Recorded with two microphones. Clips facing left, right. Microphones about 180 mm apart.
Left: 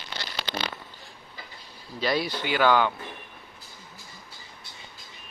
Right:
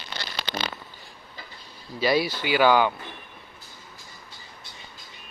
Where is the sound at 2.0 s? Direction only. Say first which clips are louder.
Right 4 dB; 10° right (ahead or behind).